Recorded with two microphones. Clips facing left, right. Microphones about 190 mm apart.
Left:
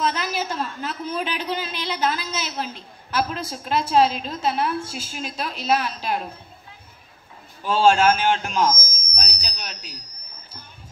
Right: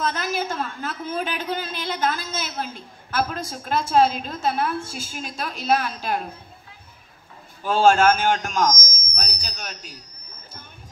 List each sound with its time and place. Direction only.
0.1 s a man's voice: 50° right (ahead or behind)
7.6 s a man's voice: 45° right (ahead or behind)